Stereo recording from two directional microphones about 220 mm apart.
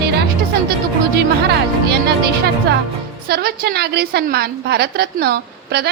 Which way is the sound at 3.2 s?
45° right (ahead or behind).